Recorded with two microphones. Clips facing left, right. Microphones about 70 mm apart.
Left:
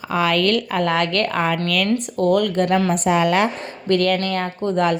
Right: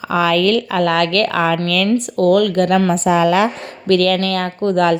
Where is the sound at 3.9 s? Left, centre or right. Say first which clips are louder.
Right 4 dB; right.